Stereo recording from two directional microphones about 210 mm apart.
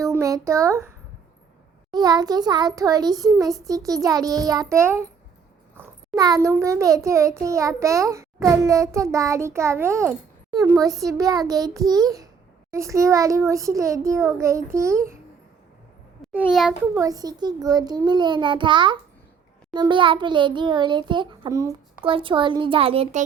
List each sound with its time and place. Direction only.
0.0 s a sound: 15° right (ahead or behind)
1.9 s a child's voice: 20° right (ahead or behind)
16.3 s a child's voice: 5° right (ahead or behind)
17.0 s a child's voice: 15° right (ahead or behind)